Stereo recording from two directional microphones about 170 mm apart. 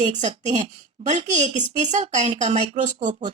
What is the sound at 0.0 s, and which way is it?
A woman's voice, 45° right (ahead or behind).